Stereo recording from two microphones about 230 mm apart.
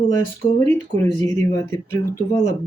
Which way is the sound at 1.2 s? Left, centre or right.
Centre.